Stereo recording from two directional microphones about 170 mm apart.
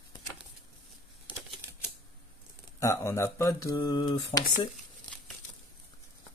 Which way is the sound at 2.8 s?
15° left (ahead or behind).